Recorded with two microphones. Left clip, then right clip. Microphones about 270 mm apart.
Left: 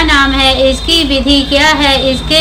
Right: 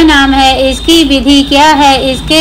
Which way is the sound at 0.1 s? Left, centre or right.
Centre.